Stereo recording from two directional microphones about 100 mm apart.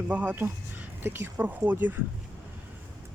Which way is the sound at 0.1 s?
15° right (ahead or behind).